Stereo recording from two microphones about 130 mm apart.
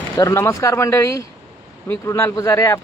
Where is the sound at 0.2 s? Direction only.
25° left (ahead or behind).